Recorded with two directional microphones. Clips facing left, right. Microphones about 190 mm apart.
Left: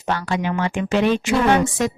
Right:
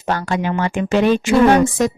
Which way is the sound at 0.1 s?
45° right (ahead or behind).